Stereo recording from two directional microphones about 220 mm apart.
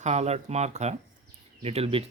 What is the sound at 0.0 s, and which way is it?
Speech, 30° right (ahead or behind).